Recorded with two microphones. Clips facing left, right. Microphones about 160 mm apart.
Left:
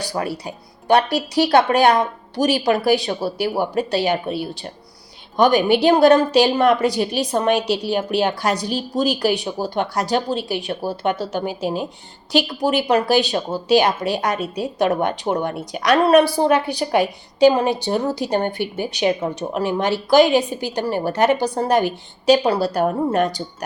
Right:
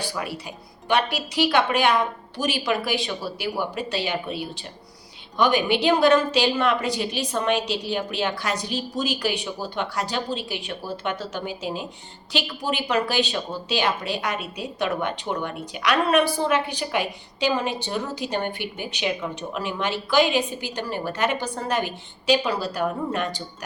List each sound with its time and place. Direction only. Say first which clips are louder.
0.1 s a woman's voice: left 6 dB; 40° left (ahead or behind)
5.4 s a woman's voice: left 6 dB; 40° left (ahead or behind)